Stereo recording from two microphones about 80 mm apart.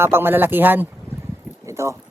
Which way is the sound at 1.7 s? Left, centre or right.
Right.